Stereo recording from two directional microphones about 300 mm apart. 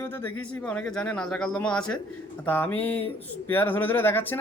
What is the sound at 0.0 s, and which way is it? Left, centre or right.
Speech, centre.